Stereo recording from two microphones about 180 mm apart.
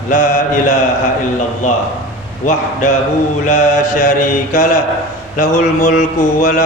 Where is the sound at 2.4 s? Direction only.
45° left (ahead or behind).